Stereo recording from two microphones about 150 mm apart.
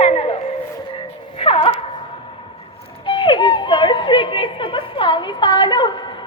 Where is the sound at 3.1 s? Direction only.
30° left (ahead or behind).